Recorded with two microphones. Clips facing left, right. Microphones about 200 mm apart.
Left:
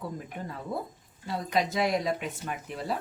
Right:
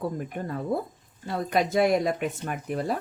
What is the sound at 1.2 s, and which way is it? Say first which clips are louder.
Speech: right 3 dB; 55° right (ahead or behind).